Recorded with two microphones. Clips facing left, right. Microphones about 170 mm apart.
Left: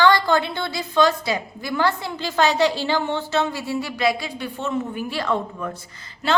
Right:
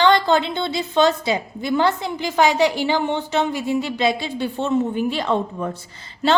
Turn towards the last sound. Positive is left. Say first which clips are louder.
# right 3 dB
turn(degrees=-30)  # may be behind; listen again after turning